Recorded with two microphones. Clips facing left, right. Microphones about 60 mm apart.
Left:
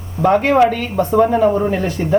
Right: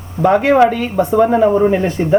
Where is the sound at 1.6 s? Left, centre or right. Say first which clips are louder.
Right 4 dB; right.